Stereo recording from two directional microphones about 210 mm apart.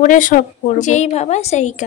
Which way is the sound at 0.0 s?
40° left (ahead or behind).